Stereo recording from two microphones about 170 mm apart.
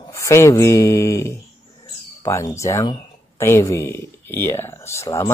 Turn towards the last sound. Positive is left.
turn(degrees=15)  # may be behind; listen again after turning